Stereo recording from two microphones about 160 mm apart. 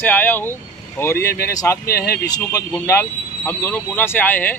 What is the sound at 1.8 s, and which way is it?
Speech, 75° left (ahead or behind).